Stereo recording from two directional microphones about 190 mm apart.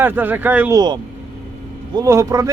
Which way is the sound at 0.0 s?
10° right (ahead or behind).